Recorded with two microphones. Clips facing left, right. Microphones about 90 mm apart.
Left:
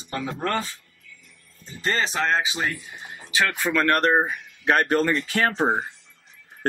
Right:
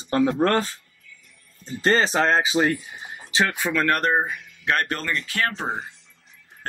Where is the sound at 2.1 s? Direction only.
40° right (ahead or behind).